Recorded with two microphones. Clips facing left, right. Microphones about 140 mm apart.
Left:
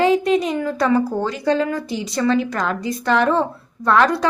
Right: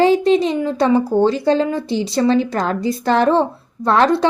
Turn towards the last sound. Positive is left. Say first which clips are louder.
# right 2 dB
turn(degrees=-30)  # may be behind; listen again after turning